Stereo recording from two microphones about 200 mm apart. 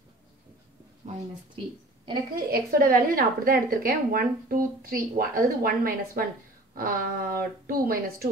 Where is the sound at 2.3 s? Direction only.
50° right (ahead or behind).